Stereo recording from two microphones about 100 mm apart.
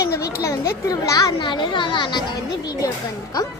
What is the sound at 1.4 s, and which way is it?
Speech, 50° left (ahead or behind).